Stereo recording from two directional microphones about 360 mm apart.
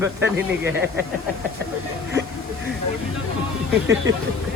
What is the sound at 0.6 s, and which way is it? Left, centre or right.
Speech, right.